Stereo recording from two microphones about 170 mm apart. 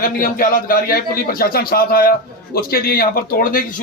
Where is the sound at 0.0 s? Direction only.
55° left (ahead or behind).